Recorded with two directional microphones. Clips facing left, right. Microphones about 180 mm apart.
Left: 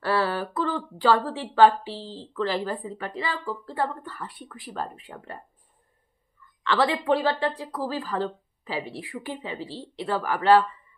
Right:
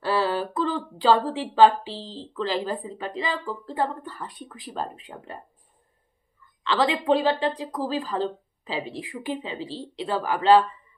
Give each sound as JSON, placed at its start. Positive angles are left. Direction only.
{"t": 0.0, "sound": "a sound", "side_deg": -15}
{"t": 2.3, "sound": "speech", "side_deg": -15}
{"t": 6.6, "sound": "speech", "side_deg": -15}